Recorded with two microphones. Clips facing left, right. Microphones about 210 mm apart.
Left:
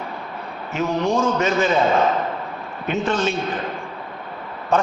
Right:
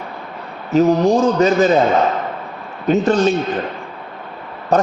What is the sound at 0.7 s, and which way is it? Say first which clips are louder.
Speech: right 8 dB; 35° right (ahead or behind).